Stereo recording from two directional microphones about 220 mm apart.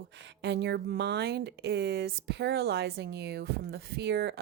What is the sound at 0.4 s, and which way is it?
Speech, 50° right (ahead or behind).